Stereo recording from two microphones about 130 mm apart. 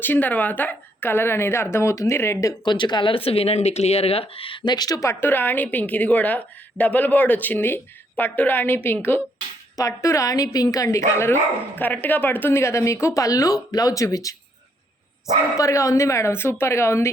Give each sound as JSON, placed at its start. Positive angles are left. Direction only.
{"t": 0.0, "sound": "speech", "side_deg": 15}
{"t": 2.6, "sound": "speech", "side_deg": 35}
{"t": 15.5, "sound": "speech", "side_deg": 25}